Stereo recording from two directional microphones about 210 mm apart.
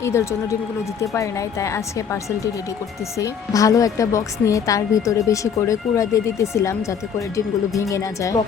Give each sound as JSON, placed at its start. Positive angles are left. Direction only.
{"t": 0.0, "sound": "speech", "side_deg": 15}
{"t": 3.2, "sound": "speech", "side_deg": 15}
{"t": 7.8, "sound": "speech", "side_deg": 15}